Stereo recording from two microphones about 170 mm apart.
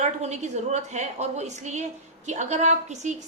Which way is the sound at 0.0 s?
40° right (ahead or behind).